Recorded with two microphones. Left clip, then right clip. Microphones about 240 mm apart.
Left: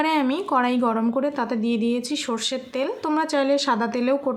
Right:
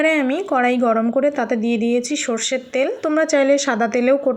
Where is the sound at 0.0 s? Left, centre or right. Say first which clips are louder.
Right 4 dB; centre.